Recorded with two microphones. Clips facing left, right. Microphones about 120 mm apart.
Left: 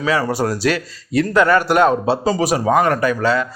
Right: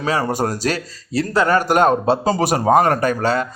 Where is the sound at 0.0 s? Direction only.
45° right (ahead or behind).